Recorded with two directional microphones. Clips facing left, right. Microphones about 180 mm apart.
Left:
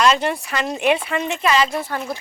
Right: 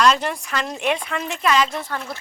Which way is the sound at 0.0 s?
5° left (ahead or behind).